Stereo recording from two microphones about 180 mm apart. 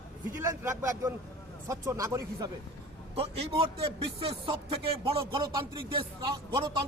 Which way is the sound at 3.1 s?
35° right (ahead or behind).